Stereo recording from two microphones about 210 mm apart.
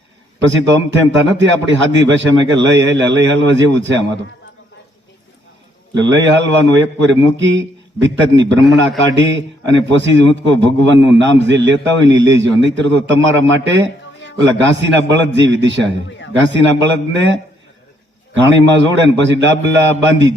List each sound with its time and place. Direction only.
0.7 s a man's voice: 60° right (ahead or behind)
5.9 s a man's voice: 60° right (ahead or behind)
16.0 s speech: 60° left (ahead or behind)
16.3 s a man's voice: 60° right (ahead or behind)